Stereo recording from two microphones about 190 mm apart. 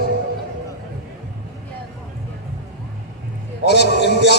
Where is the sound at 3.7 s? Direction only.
60° left (ahead or behind).